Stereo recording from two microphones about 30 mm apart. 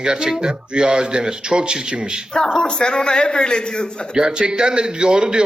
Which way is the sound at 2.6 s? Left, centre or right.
Left.